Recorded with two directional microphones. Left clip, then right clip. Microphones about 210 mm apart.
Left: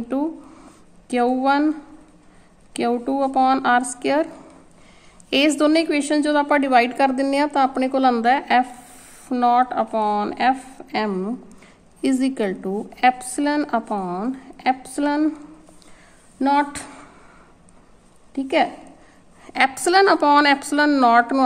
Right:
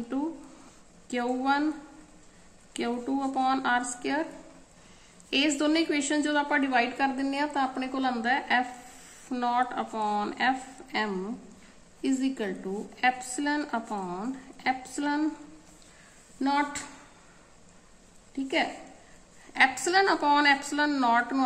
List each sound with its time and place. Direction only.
1.0 s a woman's voice: 45° left (ahead or behind)
2.7 s a woman's voice: 45° left (ahead or behind)
5.3 s a woman's voice: 45° left (ahead or behind)
16.3 s a woman's voice: 50° left (ahead or behind)
18.3 s a woman's voice: 50° left (ahead or behind)